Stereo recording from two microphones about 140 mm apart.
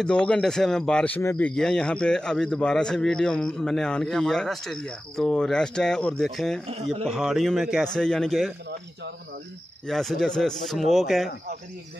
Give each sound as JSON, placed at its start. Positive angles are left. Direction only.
{"t": 0.0, "sound": "speech", "side_deg": 5}
{"t": 6.7, "sound": "a man's voice", "side_deg": -45}
{"t": 7.1, "sound": "speech", "side_deg": -5}
{"t": 9.8, "sound": "speech", "side_deg": 0}